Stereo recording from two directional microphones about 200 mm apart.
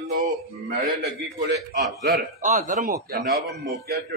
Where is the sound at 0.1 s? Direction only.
45° right (ahead or behind).